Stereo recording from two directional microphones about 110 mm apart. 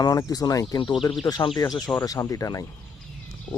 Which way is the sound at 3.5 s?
15° left (ahead or behind).